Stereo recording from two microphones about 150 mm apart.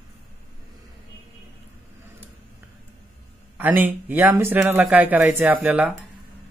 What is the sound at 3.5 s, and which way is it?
A man's voice, 10° right (ahead or behind).